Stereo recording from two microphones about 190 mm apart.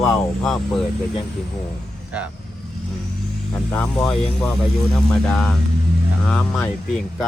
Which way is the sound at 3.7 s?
10° left (ahead or behind).